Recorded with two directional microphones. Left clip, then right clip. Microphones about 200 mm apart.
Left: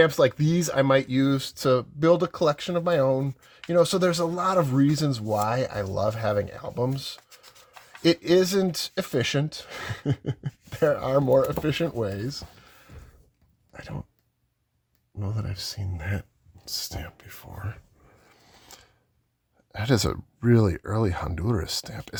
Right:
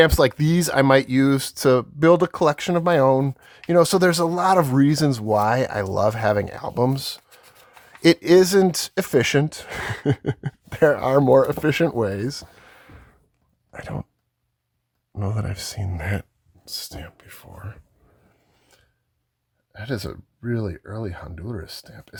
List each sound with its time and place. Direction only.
0.0 s speech: 30° right (ahead or behind)
13.7 s a sound: 35° right (ahead or behind)
15.1 s speech: 35° right (ahead or behind)
16.6 s speech: 15° right (ahead or behind)
19.7 s speech: 20° left (ahead or behind)